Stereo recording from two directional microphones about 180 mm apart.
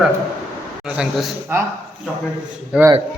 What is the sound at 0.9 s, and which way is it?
Speech, 5° right (ahead or behind).